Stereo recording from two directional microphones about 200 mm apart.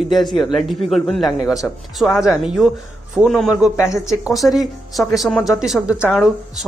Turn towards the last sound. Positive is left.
turn(degrees=10)  # may be behind; listen again after turning